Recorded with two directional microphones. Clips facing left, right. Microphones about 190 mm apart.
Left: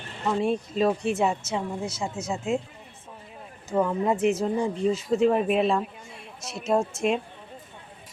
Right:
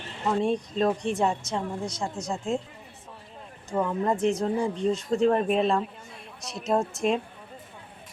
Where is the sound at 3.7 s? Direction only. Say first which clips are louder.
Left 2 dB; 5° left (ahead or behind).